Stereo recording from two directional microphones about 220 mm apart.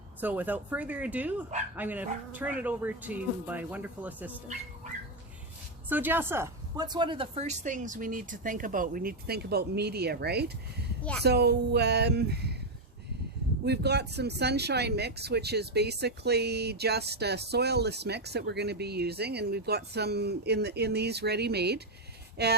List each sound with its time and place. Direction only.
0.2 s speech: 10° right (ahead or behind)
5.9 s speech: 10° right (ahead or behind); by 12.5 s 50° right (ahead or behind)
13.7 s speech: 50° right (ahead or behind)